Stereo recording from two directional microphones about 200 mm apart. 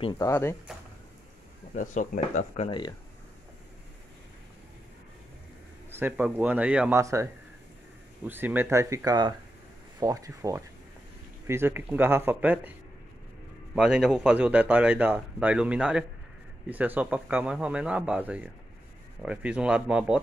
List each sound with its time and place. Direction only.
0.0 s speech: 15° left (ahead or behind)
1.7 s speech: 40° left (ahead or behind)
5.9 s speech: 10° right (ahead or behind)
13.7 s a man's voice: 5° right (ahead or behind)